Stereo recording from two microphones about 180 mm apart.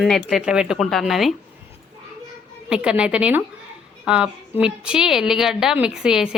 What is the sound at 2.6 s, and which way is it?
A woman's voice, 5° right (ahead or behind).